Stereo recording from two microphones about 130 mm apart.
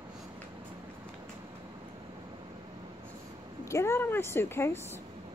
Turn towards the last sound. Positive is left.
turn(degrees=20)  # may be behind; listen again after turning